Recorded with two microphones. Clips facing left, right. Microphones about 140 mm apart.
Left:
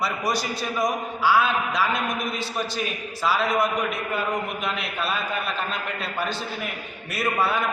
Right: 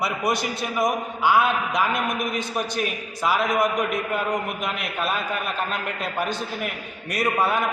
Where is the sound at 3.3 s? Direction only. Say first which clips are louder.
Right 1 dB; 15° right (ahead or behind).